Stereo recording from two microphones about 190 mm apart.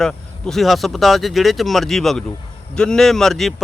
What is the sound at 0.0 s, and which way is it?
Speech, centre (ahead or behind).